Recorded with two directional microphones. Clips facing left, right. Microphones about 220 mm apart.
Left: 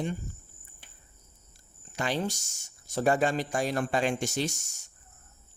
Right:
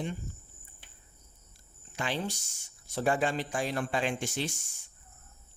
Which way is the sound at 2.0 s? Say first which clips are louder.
Left 3 dB; 45° left (ahead or behind).